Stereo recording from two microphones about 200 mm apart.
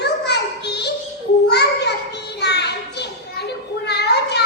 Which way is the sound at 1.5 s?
55° left (ahead or behind).